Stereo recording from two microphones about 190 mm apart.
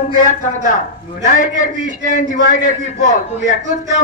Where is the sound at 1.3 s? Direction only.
40° left (ahead or behind).